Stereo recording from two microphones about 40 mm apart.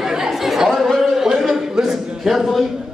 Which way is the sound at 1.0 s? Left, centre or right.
Centre.